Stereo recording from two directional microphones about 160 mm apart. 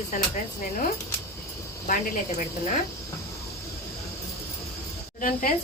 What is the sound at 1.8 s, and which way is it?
Speech, 55° left (ahead or behind).